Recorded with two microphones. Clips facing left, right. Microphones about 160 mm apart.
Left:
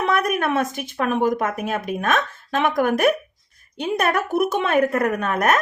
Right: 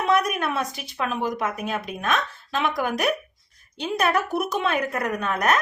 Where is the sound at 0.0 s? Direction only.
55° left (ahead or behind).